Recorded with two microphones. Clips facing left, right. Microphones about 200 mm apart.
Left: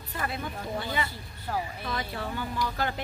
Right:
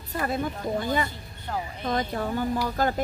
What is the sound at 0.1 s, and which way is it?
Speech, 45° right (ahead or behind).